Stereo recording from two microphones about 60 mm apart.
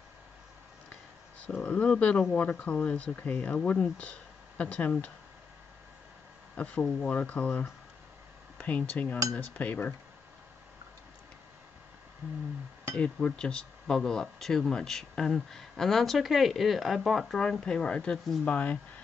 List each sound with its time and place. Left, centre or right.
1.6 s speech: centre
6.5 s speech: left
6.8 s speech: centre
7.1 s speech: left
8.5 s speech: left
12.9 s speech: centre
17.4 s speech: centre